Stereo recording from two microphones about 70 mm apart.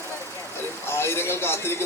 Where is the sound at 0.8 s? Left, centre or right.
Left.